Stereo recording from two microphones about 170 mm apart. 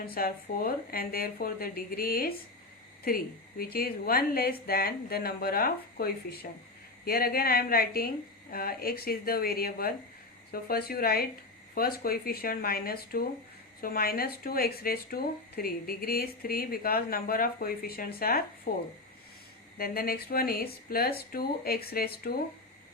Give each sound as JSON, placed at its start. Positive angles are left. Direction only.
{"t": 0.1, "sound": "speech", "side_deg": 60}
{"t": 3.6, "sound": "speech", "side_deg": 60}